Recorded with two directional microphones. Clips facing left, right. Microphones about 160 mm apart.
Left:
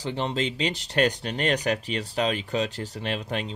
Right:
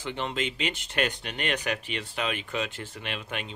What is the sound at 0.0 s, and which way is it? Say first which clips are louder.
Speech: left 4 dB; 35° left (ahead or behind).